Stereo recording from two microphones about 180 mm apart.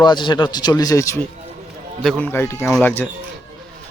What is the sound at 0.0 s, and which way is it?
A man's voice, 25° left (ahead or behind).